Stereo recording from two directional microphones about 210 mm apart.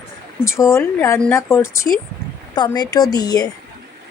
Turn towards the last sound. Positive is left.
turn(degrees=20)  # may be behind; listen again after turning